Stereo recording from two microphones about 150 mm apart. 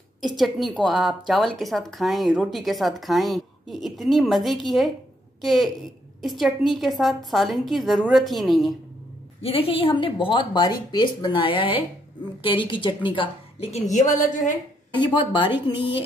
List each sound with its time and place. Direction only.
0.4 s speech: centre (ahead or behind)
9.4 s speech: 40° left (ahead or behind); by 14.6 s 60° left (ahead or behind)
15.0 s speech: 35° left (ahead or behind)